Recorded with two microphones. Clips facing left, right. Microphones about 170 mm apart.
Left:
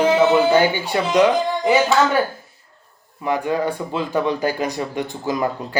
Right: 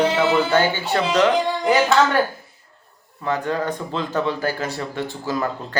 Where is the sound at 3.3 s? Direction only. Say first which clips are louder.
Left 2 dB; 10° left (ahead or behind).